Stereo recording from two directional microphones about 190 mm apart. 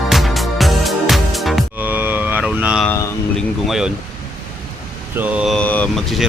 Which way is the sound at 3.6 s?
Centre (ahead or behind).